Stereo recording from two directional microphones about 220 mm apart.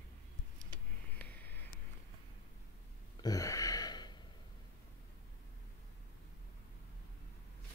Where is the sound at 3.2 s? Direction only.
15° left (ahead or behind).